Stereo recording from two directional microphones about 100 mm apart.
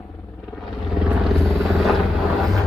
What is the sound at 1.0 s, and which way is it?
Vehicle, centre (ahead or behind).